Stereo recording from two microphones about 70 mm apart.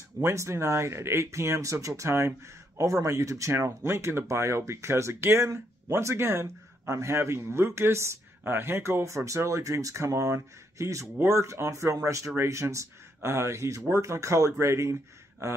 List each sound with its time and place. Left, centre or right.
0.2 s speech: right
3.5 s speech: right